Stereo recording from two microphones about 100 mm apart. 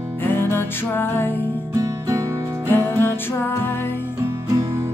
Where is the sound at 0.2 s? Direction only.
20° left (ahead or behind).